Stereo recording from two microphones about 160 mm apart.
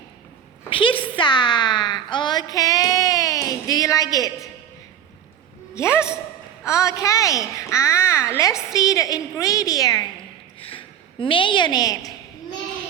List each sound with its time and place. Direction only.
0.7 s a sound: 35° left (ahead or behind)
5.7 s a woman's voice: 15° left (ahead or behind)
10.6 s a woman's voice: 35° left (ahead or behind)